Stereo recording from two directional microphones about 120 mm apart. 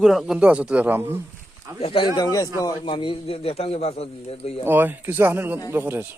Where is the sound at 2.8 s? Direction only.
45° left (ahead or behind).